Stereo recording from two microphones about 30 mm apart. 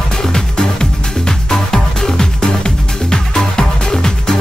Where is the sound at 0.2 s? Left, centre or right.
Left.